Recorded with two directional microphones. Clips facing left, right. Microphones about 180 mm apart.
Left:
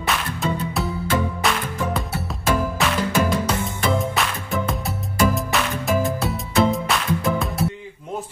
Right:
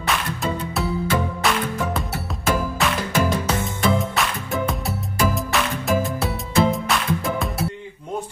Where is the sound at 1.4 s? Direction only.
Centre (ahead or behind).